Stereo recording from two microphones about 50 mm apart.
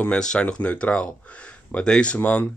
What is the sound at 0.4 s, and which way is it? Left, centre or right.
Speech, left.